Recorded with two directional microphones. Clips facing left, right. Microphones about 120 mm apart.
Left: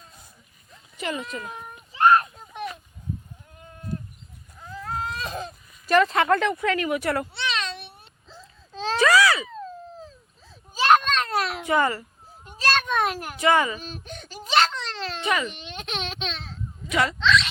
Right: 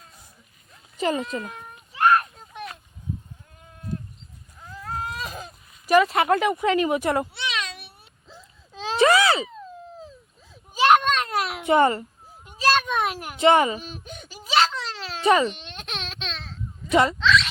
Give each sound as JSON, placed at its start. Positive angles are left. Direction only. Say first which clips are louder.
{"t": 0.9, "sound": "speech", "louder": "right 6 dB", "side_deg": -30}
{"t": 1.9, "sound": "a sound", "louder": "left 1 dB", "side_deg": 0}
{"t": 4.7, "sound": "baby cry", "louder": "left 1 dB", "side_deg": -10}
{"t": 6.2, "sound": "meow", "louder": "right 1 dB", "side_deg": -15}
{"t": 9.0, "sound": "babbling", "louder": "right 1 dB", "side_deg": -25}
{"t": 10.8, "sound": "children playing", "louder": "right 1 dB", "side_deg": -15}
{"t": 11.6, "sound": "a child's voice", "louder": "right 6 dB", "side_deg": -25}
{"t": 12.5, "sound": "a sound", "louder": "right 3 dB", "side_deg": -10}
{"t": 13.4, "sound": "speech", "louder": "right 3 dB", "side_deg": -25}
{"t": 13.7, "sound": "baby cry", "louder": "right 1 dB", "side_deg": -10}
{"t": 15.2, "sound": "speech", "louder": "right 8 dB", "side_deg": -30}
{"t": 15.5, "sound": "baby cry", "louder": "left 3 dB", "side_deg": 0}
{"t": 16.9, "sound": "speech", "louder": "right 5 dB", "side_deg": -30}
{"t": 17.2, "sound": "a sound", "louder": "right 1 dB", "side_deg": 0}